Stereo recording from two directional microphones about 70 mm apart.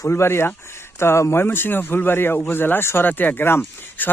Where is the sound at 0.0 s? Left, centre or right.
Left.